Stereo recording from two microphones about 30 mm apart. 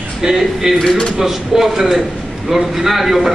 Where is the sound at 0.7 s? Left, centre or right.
Left.